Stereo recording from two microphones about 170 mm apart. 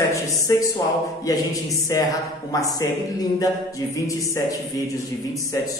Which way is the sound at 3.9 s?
20° left (ahead or behind).